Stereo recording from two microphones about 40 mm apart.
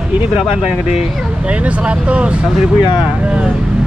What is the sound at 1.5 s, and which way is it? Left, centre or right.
Speech, right.